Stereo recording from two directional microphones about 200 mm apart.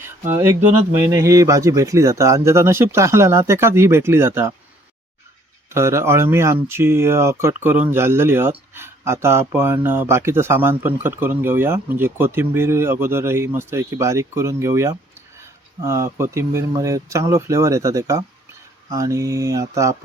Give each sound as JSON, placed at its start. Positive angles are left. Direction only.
{"t": 1.0, "sound": "speech", "side_deg": -15}
{"t": 5.7, "sound": "speech", "side_deg": -15}